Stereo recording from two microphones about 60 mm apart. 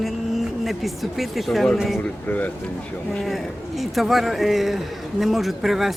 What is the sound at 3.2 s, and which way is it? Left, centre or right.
A man's voice, centre.